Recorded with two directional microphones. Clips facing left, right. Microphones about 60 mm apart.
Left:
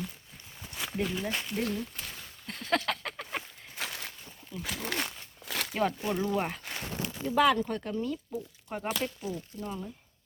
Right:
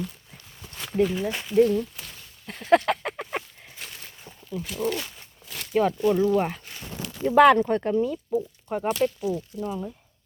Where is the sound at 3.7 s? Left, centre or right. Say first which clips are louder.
Left 4 dB; left.